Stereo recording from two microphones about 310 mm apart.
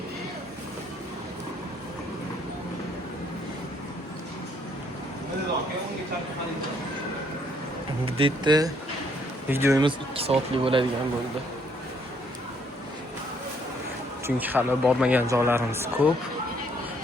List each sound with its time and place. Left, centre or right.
8.0 s speech: centre
14.3 s a man's voice: centre